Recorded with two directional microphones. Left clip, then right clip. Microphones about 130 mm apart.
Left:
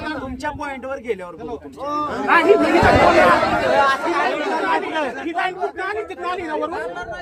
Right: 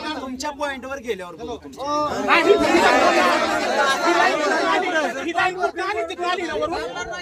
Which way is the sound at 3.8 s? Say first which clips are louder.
Even; 20° left (ahead or behind).